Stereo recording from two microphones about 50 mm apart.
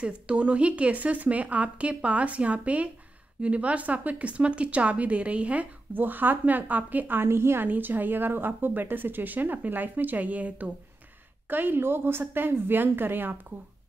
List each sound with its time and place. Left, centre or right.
0.0 s speech: right
5.9 s a woman's voice: right
7.2 s a woman's voice: right
7.6 s a woman's voice: right